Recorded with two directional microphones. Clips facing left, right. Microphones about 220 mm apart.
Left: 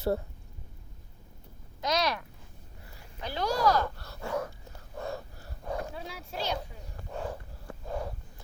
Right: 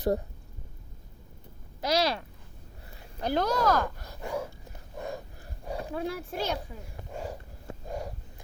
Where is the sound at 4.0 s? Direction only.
15° right (ahead or behind).